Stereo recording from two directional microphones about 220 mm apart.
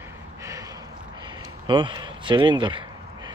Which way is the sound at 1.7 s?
20° right (ahead or behind).